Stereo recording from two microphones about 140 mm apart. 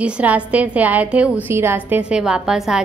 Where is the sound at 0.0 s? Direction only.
10° right (ahead or behind).